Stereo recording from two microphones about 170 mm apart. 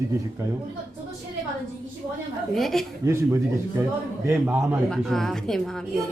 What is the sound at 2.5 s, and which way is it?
Speech, centre (ahead or behind).